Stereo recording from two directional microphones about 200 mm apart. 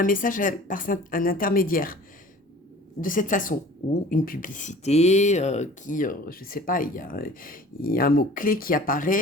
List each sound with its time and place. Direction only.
0.0 s speech: 40° left (ahead or behind)
3.0 s a woman's voice: 40° left (ahead or behind)